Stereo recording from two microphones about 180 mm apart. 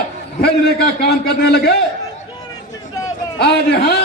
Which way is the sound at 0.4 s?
60° left (ahead or behind).